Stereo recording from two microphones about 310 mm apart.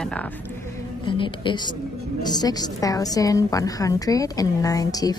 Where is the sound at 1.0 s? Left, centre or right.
Centre.